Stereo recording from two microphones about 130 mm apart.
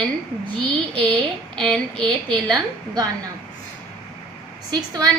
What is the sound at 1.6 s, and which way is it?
A woman's voice, 5° left (ahead or behind).